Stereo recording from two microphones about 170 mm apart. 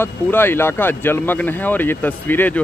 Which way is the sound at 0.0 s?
15° left (ahead or behind).